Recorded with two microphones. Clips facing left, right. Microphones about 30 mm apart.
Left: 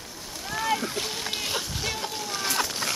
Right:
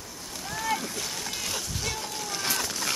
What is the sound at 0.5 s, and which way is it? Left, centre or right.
Splash, centre.